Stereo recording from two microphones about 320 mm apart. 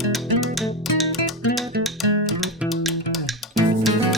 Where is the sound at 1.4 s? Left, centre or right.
Left.